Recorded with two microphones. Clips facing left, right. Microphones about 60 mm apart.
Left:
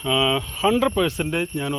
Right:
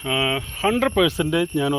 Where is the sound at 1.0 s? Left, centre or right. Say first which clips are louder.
Right 3 dB; right.